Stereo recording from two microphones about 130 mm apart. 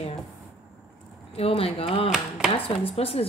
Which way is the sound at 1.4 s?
50° left (ahead or behind).